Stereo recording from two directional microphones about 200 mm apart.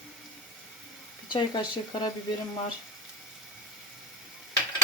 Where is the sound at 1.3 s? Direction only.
20° left (ahead or behind).